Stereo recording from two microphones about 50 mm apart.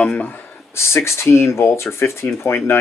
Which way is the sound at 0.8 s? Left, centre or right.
Left.